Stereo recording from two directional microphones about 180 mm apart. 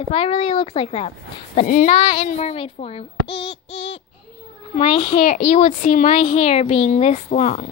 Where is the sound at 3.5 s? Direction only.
35° left (ahead or behind).